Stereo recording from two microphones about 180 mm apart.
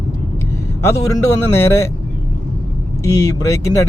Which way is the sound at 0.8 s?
15° left (ahead or behind).